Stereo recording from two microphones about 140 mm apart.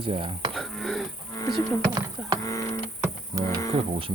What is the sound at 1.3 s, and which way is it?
Insect, 25° left (ahead or behind).